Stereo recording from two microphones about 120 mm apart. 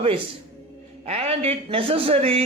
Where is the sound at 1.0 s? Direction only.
60° right (ahead or behind).